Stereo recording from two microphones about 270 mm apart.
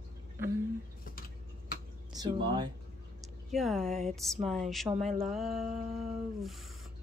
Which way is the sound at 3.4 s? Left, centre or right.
Centre.